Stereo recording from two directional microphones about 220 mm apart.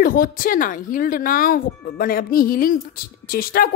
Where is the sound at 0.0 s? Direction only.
40° left (ahead or behind).